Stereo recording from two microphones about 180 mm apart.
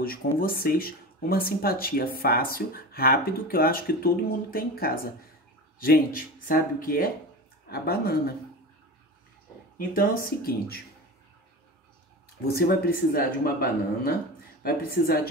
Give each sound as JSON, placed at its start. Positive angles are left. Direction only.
{"t": 0.0, "sound": "speech", "side_deg": 55}
{"t": 9.8, "sound": "speech", "side_deg": 55}
{"t": 12.4, "sound": "speech", "side_deg": 60}